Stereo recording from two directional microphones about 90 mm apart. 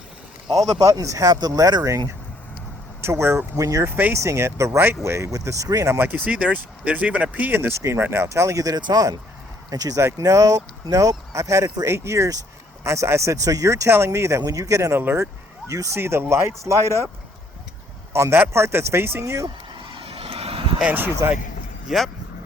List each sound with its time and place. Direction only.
0.8 s speech: 40° right (ahead or behind)
3.0 s a man's voice: 30° right (ahead or behind)
3.8 s a man's voice: 25° right (ahead or behind)
6.0 s speech: 15° right (ahead or behind); by 17.1 s 30° right (ahead or behind)
18.1 s a man's voice: 30° right (ahead or behind)
19.8 s vehicle: 75° right (ahead or behind); by 20.7 s 90° right
21.2 s a man's voice: 30° right (ahead or behind)
21.8 s speech: centre (ahead or behind)